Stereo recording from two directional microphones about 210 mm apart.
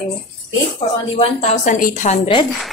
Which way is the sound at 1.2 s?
30° left (ahead or behind).